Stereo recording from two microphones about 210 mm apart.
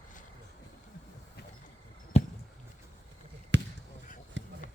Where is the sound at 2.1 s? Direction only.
30° left (ahead or behind).